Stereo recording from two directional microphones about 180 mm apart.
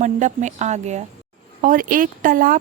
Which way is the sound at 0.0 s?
40° right (ahead or behind).